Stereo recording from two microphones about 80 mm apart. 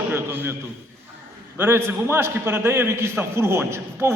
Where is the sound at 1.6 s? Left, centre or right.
Right.